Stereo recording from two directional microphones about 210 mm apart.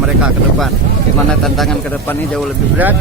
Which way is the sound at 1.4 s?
Centre (ahead or behind).